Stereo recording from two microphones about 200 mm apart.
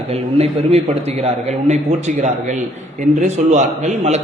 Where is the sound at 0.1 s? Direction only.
30° right (ahead or behind).